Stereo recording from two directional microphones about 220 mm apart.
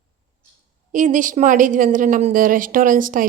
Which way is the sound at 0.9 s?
35° right (ahead or behind).